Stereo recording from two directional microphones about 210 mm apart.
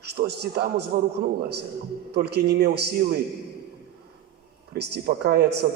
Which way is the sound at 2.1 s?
50° right (ahead or behind).